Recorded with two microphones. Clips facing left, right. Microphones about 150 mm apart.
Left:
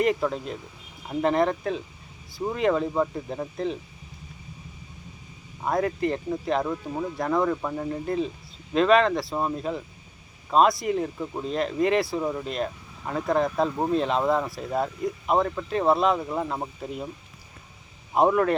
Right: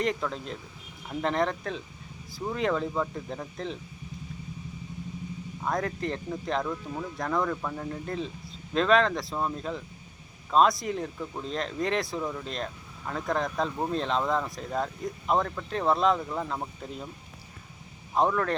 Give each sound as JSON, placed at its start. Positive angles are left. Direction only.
{"t": 0.0, "sound": "speech", "side_deg": 5}
{"t": 2.9, "sound": "speech", "side_deg": 15}
{"t": 5.6, "sound": "speech", "side_deg": 5}
{"t": 6.6, "sound": "speech", "side_deg": 20}
{"t": 7.2, "sound": "speech", "side_deg": 5}
{"t": 9.3, "sound": "speech", "side_deg": 15}
{"t": 12.2, "sound": "speech", "side_deg": 20}
{"t": 12.5, "sound": "speech", "side_deg": 5}
{"t": 18.1, "sound": "speech", "side_deg": 15}